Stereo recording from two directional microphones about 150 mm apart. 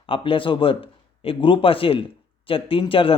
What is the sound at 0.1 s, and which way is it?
A man's voice, 35° left (ahead or behind).